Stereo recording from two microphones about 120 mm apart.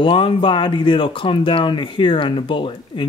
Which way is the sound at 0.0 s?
45° left (ahead or behind).